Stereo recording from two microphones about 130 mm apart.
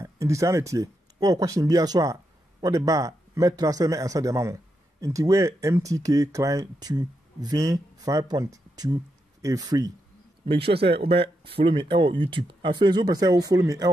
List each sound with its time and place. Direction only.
0.0 s speech: 20° right (ahead or behind)
10.4 s speech: 45° right (ahead or behind); by 13.8 s 25° right (ahead or behind)